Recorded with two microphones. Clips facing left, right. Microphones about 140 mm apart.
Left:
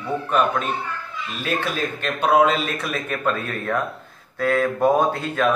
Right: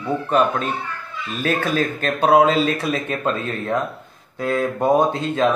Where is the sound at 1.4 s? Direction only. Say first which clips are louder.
Right 4 dB; 40° right (ahead or behind); by 4.7 s 20° right (ahead or behind).